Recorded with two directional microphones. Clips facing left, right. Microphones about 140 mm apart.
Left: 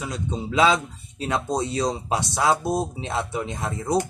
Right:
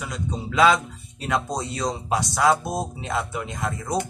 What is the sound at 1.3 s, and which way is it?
Speech, 25° left (ahead or behind).